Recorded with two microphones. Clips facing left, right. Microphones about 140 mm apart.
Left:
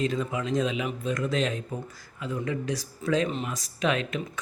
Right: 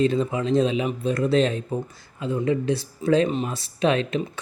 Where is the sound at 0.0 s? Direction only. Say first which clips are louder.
Right 6 dB; 30° right (ahead or behind).